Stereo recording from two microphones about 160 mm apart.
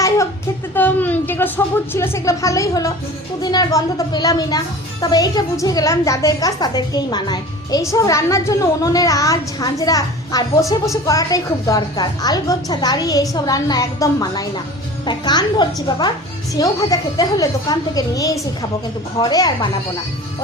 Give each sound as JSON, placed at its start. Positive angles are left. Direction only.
{"t": 0.7, "sound": "a woman's voice", "side_deg": 10}